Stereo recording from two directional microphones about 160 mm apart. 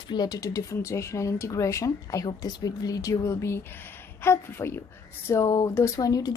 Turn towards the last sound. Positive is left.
turn(degrees=25)  # may be behind; listen again after turning